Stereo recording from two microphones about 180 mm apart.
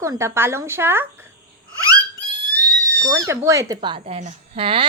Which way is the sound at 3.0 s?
20° right (ahead or behind).